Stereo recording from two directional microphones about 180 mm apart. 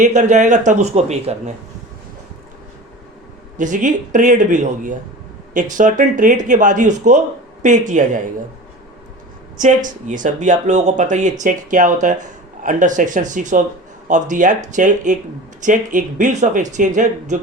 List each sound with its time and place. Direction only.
0.0 s speech: 40° right (ahead or behind)
3.6 s speech: 45° right (ahead or behind)
9.6 s speech: 45° right (ahead or behind)